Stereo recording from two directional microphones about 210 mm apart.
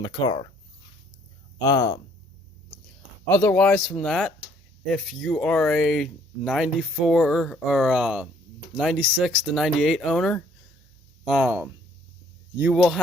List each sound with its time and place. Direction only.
0.0 s speech: 20° left (ahead or behind)
1.6 s speech: 15° left (ahead or behind)
3.2 s speech: 5° left (ahead or behind)